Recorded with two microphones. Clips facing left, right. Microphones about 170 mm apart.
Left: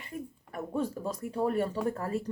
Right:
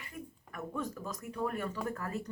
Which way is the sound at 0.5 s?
30° left (ahead or behind).